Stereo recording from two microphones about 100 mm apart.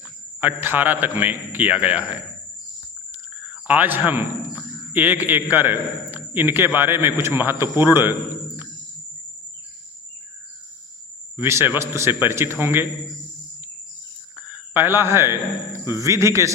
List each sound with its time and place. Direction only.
0.3 s a man's voice: 20° right (ahead or behind)
3.5 s a man's voice: 15° right (ahead or behind)
11.3 s a man's voice: 25° right (ahead or behind)
14.3 s a man's voice: 20° right (ahead or behind)